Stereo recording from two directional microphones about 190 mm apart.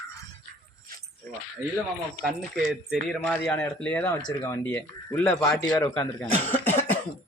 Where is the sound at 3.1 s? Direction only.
5° left (ahead or behind).